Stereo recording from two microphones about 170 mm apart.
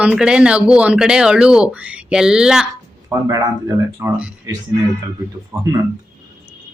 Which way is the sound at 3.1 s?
15° right (ahead or behind).